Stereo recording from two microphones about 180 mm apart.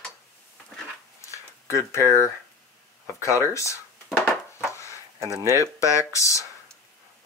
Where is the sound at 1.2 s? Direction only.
15° left (ahead or behind).